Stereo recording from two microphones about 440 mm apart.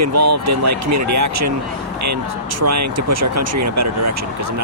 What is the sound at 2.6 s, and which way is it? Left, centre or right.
Speech, right.